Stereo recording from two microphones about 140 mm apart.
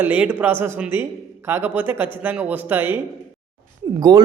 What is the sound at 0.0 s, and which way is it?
Speech, 15° right (ahead or behind).